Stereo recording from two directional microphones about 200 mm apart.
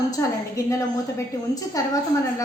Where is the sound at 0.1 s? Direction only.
15° left (ahead or behind).